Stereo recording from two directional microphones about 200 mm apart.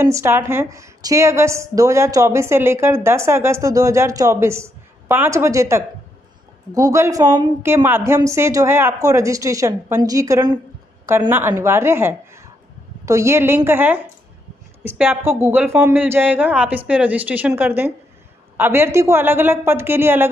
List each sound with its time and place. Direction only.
0.1 s a woman's voice: 15° right (ahead or behind)